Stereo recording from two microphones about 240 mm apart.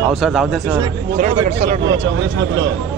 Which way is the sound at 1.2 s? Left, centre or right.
Right.